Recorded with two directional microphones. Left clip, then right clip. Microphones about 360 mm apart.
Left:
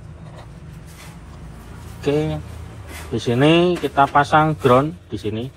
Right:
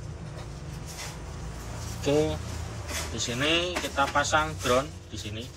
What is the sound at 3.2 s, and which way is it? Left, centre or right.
Speech, centre.